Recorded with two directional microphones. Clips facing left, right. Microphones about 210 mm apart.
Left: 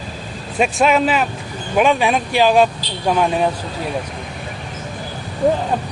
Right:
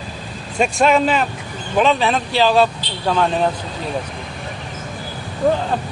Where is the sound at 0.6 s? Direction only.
5° left (ahead or behind).